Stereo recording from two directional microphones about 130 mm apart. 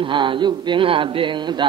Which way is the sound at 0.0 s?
40° right (ahead or behind).